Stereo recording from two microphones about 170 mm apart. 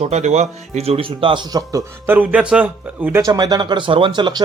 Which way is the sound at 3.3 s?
20° right (ahead or behind).